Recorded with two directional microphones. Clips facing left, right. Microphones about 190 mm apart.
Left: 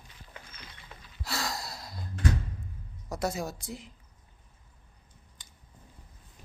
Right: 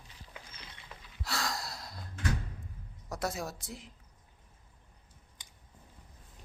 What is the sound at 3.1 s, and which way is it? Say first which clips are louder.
Speech: left 4 dB; centre (ahead or behind).